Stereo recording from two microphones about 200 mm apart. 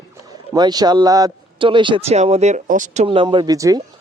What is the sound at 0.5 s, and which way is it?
Speech, 20° right (ahead or behind).